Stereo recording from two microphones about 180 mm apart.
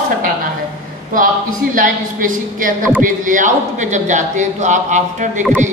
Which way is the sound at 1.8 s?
50° right (ahead or behind).